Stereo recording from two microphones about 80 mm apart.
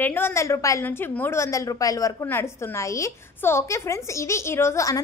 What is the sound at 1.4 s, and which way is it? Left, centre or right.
A woman's voice, left.